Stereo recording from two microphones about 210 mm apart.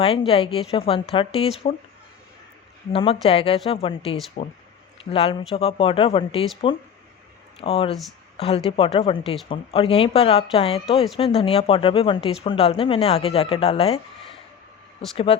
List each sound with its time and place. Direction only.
0.0 s speech: 25° left (ahead or behind)
2.9 s speech: 25° left (ahead or behind)
15.1 s speech: 25° left (ahead or behind)